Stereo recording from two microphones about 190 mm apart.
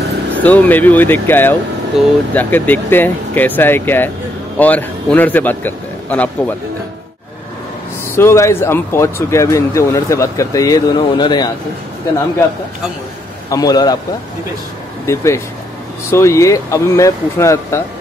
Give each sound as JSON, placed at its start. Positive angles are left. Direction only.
{"t": 0.3, "sound": "speech", "side_deg": 10}
{"t": 2.0, "sound": "speech", "side_deg": 0}
{"t": 2.3, "sound": "speech", "side_deg": 10}
{"t": 8.2, "sound": "speech", "side_deg": 15}
{"t": 13.5, "sound": "a man's voice", "side_deg": 20}
{"t": 15.0, "sound": "speech", "side_deg": 15}